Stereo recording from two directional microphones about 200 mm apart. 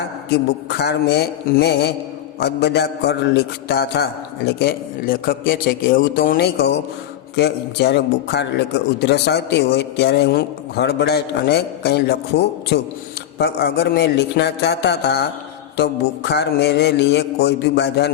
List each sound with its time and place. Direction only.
0.7 s a man's voice: 55° left (ahead or behind)